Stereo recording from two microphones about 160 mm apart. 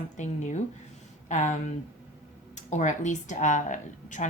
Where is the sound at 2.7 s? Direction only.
50° left (ahead or behind).